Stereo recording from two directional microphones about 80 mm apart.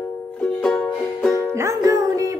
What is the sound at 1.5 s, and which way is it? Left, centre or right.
Music, right.